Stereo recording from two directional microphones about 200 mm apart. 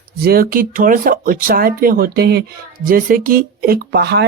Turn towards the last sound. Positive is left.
turn(degrees=-60)  # may be behind; listen again after turning